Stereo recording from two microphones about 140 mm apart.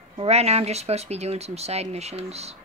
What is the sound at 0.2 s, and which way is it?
Speech, 50° right (ahead or behind).